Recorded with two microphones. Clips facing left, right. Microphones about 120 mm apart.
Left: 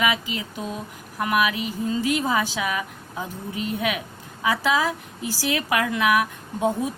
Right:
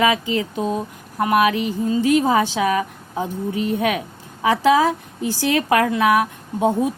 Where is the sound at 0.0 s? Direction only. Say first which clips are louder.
Right 6 dB; 35° right (ahead or behind).